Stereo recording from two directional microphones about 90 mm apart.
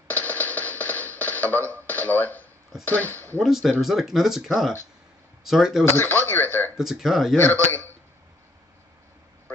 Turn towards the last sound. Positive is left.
turn(degrees=20)  # may be behind; listen again after turning